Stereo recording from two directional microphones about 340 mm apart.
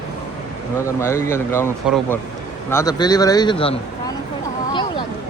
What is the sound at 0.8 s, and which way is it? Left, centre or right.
Speech, centre.